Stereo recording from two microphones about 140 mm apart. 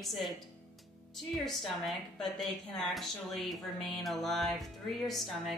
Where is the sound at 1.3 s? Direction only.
Centre (ahead or behind).